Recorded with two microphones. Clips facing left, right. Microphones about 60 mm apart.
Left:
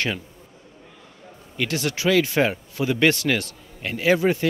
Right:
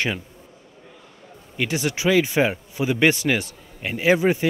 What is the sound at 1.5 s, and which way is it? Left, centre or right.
A man's voice, centre.